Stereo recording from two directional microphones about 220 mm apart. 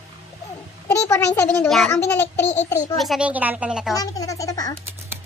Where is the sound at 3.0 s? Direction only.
5° right (ahead or behind).